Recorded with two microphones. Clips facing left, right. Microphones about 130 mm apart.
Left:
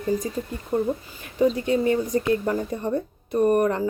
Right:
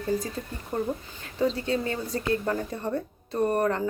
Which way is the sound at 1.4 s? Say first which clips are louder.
Left 6 dB; 15° left (ahead or behind).